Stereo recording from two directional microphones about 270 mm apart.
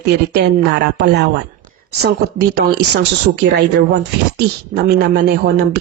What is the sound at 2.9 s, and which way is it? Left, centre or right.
Speech, right.